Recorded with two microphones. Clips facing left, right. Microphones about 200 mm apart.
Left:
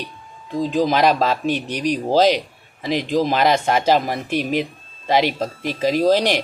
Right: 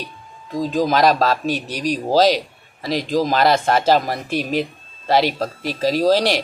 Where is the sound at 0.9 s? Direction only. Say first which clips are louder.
Right 3 dB; 10° left (ahead or behind).